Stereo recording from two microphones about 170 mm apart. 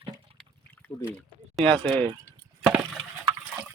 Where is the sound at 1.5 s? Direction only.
5° left (ahead or behind).